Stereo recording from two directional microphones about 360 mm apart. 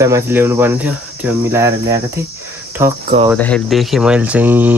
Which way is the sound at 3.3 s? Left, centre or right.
Centre.